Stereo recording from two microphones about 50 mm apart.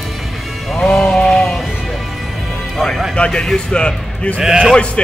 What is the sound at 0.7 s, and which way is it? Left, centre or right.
Sheep, centre.